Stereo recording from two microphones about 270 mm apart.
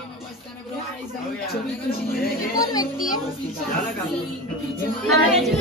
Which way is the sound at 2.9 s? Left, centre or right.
Left.